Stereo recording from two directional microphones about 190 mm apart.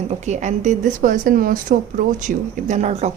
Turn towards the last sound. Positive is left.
turn(degrees=-35)  # may be behind; listen again after turning